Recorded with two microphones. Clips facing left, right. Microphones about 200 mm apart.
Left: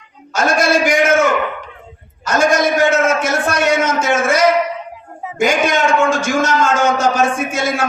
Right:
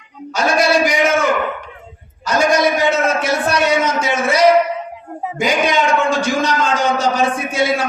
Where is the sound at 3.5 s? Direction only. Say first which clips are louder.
Left 1 dB; 45° left (ahead or behind).